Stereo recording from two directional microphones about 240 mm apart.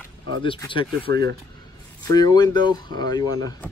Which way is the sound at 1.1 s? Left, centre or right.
Right.